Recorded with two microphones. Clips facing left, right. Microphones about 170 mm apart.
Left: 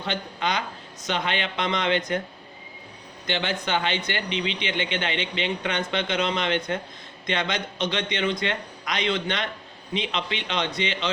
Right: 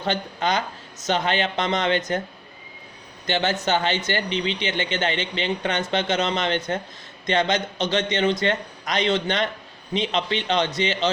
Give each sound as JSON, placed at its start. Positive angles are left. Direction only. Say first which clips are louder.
{"t": 0.0, "sound": "speech", "louder": "right 4 dB", "side_deg": -40}
{"t": 3.2, "sound": "speech", "louder": "right 4 dB", "side_deg": -40}